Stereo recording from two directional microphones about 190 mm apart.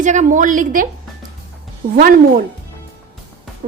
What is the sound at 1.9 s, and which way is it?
Speech, 50° right (ahead or behind).